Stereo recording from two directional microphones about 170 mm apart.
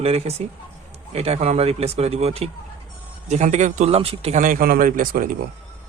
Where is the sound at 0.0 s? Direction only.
40° right (ahead or behind).